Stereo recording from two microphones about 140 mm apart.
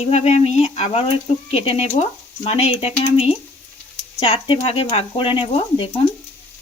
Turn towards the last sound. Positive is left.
turn(degrees=35)  # may be behind; listen again after turning